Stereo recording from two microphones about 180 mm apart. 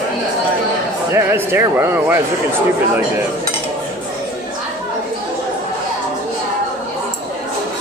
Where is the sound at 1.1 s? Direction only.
15° right (ahead or behind).